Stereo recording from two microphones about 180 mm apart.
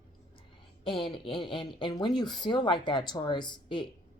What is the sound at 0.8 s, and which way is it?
Speech, 30° left (ahead or behind).